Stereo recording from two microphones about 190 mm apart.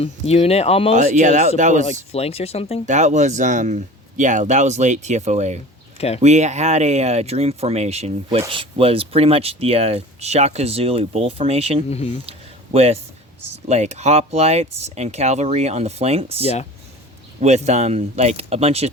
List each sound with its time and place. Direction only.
0.0 s speech: 35° left (ahead or behind)
0.9 s speech: 40° right (ahead or behind)
2.1 s speech: 30° left (ahead or behind)
2.8 s speech: 40° right (ahead or behind)
11.9 s speech: 35° left (ahead or behind)
12.7 s speech: 35° right (ahead or behind)
16.4 s speech: 35° left (ahead or behind)
17.4 s speech: 35° right (ahead or behind)